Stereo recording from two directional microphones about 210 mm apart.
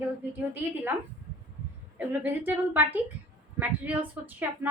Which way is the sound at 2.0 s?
10° right (ahead or behind).